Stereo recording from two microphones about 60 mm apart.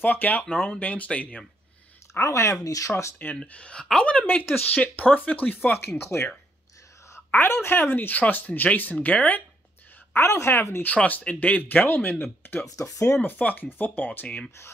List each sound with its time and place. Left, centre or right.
0.0 s speech: left
2.1 s speech: left
2.6 s speech: left
3.3 s speech: centre
5.9 s speech: left
7.2 s speech: left
10.5 s speech: left
11.0 s speech: left
12.6 s speech: left
13.2 s speech: left
14.2 s speech: centre